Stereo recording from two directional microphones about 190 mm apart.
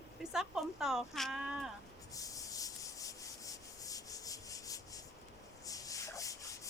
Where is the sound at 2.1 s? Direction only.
15° left (ahead or behind).